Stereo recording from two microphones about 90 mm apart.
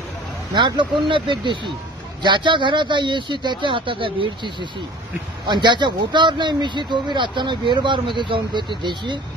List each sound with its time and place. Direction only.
0.6 s speech: 60° right (ahead or behind)